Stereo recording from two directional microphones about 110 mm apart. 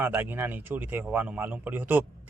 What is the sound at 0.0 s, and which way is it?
A man's voice, 20° right (ahead or behind).